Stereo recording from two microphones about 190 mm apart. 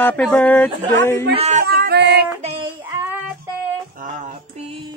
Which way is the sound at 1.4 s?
35° right (ahead or behind).